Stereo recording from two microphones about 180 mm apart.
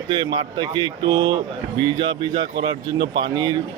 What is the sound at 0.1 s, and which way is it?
A man's voice, 25° right (ahead or behind).